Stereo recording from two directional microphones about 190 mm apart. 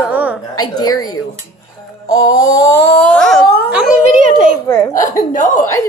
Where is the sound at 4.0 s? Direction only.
45° right (ahead or behind).